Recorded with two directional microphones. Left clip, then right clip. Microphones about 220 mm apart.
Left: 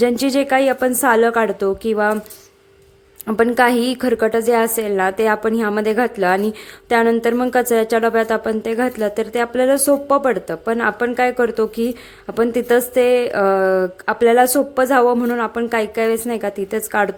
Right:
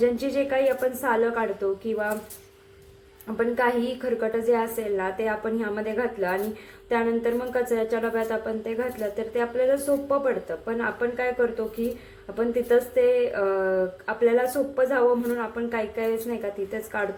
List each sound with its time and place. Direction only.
0.0 s a woman's voice: 45° left (ahead or behind)
3.2 s a woman's voice: 45° left (ahead or behind)